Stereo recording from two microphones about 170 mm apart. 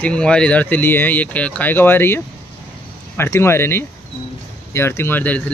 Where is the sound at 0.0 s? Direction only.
5° left (ahead or behind).